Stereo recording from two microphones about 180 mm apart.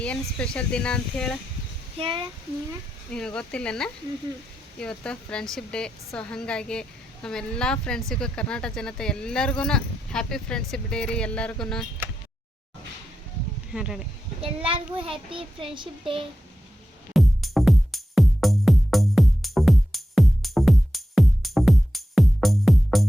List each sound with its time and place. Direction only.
0.0 s speech: 5° left (ahead or behind)
2.0 s speech: 30° right (ahead or behind)
3.1 s speech: 5° left (ahead or behind)
13.7 s speech: 5° right (ahead or behind)
14.4 s speech: 30° right (ahead or behind)
17.2 s music: centre (ahead or behind)